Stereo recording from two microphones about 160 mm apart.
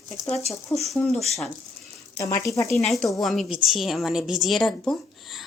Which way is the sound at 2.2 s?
20° left (ahead or behind).